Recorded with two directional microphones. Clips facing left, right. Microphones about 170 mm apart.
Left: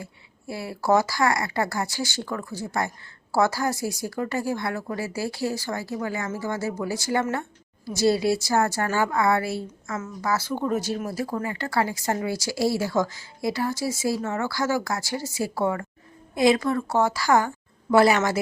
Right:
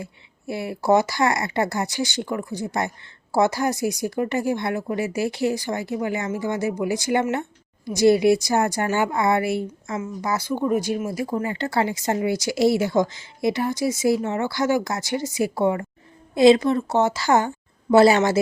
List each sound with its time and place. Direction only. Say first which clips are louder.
0.0 s speech: right 4 dB; 20° right (ahead or behind)